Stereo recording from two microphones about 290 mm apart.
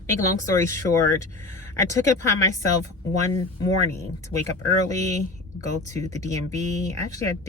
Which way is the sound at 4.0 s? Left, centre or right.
Centre.